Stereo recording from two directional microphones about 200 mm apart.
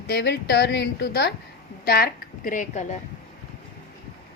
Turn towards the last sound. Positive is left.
turn(degrees=35)  # may be behind; listen again after turning